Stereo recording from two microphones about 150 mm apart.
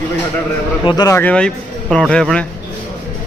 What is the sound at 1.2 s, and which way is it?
Speech, 10° left (ahead or behind).